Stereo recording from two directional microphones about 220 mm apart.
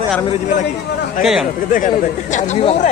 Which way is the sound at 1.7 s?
35° left (ahead or behind).